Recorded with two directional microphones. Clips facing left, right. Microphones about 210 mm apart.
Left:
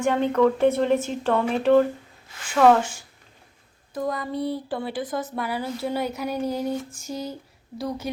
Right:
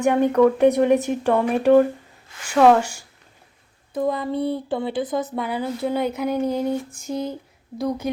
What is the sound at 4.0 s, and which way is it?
A woman's voice, 25° right (ahead or behind).